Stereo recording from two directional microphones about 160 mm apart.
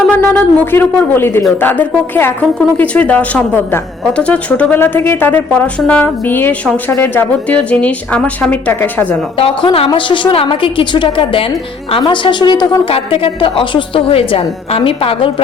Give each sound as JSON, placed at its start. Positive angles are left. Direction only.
{"t": 0.0, "sound": "a woman's voice", "side_deg": 10}
{"t": 9.4, "sound": "a woman's voice", "side_deg": 30}